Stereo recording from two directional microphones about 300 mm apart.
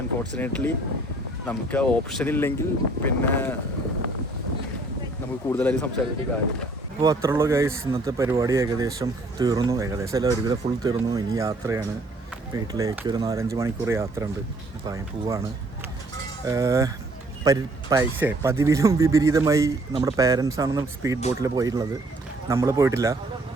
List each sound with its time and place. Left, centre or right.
0.3 s a man's voice: centre
5.5 s a man's voice: centre
7.0 s speech: centre
16.5 s speech: centre